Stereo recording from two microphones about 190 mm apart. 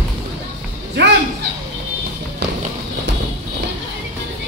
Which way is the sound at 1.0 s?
65° right (ahead or behind).